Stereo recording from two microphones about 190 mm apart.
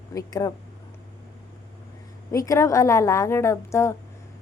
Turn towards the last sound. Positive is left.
turn(degrees=15)  # may be behind; listen again after turning